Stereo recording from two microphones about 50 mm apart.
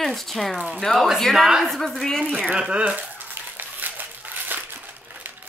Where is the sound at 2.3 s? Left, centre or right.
Right.